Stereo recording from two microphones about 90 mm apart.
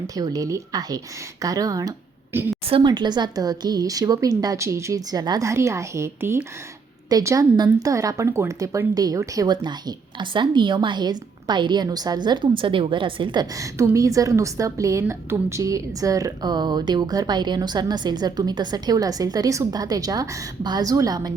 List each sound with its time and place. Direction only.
0.2 s a woman's voice: 40° right (ahead or behind)
2.3 s a woman's voice: 25° right (ahead or behind)
2.8 s a woman's voice: 55° right (ahead or behind)
5.4 s speech: 35° right (ahead or behind)
7.1 s a woman's voice: 40° right (ahead or behind)
9.6 s a woman's voice: 55° right (ahead or behind)
13.6 s a woman's voice: 35° right (ahead or behind)